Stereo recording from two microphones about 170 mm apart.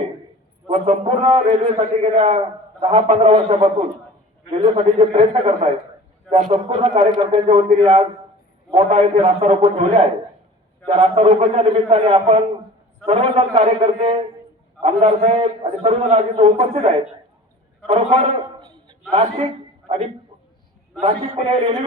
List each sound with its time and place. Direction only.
0.7 s a man's voice: 40° right (ahead or behind)
6.3 s a man's voice: 45° right (ahead or behind)
7.4 s a man's voice: 35° right (ahead or behind)